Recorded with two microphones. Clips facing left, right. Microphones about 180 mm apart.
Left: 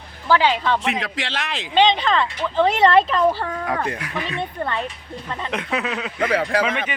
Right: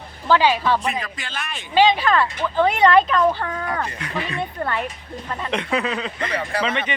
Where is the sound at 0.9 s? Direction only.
90° left.